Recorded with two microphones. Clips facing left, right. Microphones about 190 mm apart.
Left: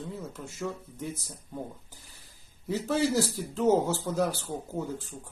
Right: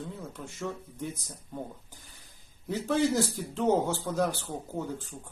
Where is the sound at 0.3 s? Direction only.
5° left (ahead or behind).